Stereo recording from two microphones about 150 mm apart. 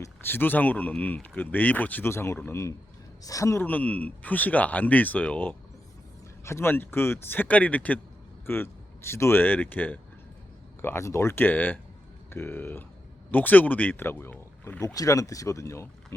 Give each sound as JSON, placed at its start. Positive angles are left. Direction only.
{"t": 0.0, "sound": "speech", "side_deg": 15}